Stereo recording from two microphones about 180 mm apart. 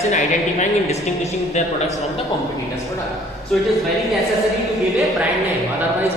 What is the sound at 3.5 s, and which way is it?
A man's voice, centre (ahead or behind).